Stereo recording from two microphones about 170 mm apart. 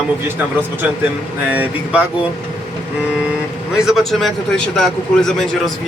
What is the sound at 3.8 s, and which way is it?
Speech, centre (ahead or behind).